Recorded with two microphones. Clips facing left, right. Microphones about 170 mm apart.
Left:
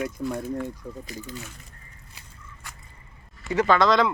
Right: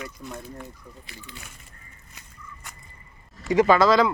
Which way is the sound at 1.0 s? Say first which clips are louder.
Left 8 dB; 40° left (ahead or behind).